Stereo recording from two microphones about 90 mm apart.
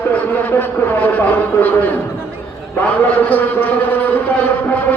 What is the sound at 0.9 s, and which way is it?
Speech, 20° left (ahead or behind).